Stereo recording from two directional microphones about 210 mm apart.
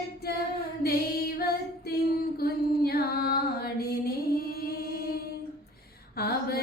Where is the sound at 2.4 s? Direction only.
45° left (ahead or behind).